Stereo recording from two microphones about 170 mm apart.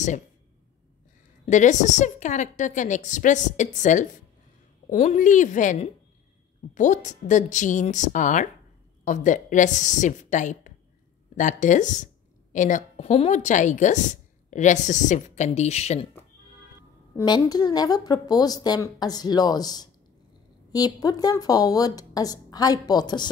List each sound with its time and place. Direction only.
1.4 s a woman's voice: 45° left (ahead or behind)
17.2 s a woman's voice: 25° left (ahead or behind)